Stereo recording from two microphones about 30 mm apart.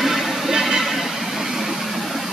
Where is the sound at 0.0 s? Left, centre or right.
Centre.